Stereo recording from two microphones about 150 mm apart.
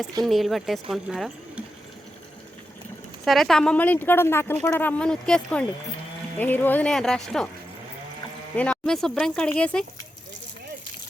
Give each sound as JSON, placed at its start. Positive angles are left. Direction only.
{"t": 0.3, "sound": "speech", "side_deg": 0}
{"t": 3.2, "sound": "speech", "side_deg": 0}
{"t": 8.5, "sound": "speech", "side_deg": 5}